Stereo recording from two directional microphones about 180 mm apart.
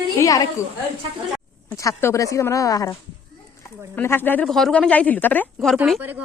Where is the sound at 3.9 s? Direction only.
10° left (ahead or behind).